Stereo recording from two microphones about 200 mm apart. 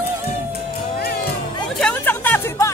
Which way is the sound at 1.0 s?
50° left (ahead or behind).